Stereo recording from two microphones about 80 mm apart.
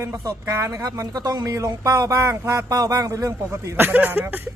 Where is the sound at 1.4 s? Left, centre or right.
Right.